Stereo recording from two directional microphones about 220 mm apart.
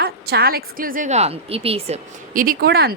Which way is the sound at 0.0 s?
45° right (ahead or behind).